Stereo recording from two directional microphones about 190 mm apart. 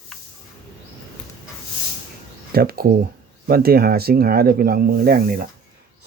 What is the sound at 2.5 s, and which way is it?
Speech, 55° right (ahead or behind).